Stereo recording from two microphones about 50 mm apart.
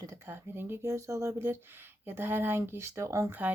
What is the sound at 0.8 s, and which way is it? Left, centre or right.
Speech, right.